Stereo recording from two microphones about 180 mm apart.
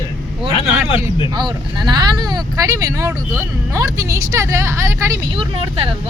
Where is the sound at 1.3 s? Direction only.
25° right (ahead or behind).